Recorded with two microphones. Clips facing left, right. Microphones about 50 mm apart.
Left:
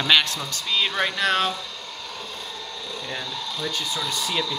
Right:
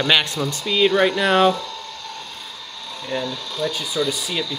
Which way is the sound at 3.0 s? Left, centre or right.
Centre.